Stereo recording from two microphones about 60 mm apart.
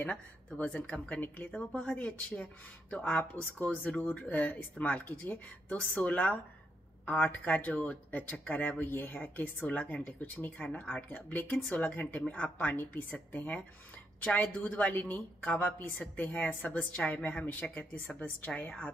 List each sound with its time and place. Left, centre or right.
0.0 s speech: left
11.1 s speech: left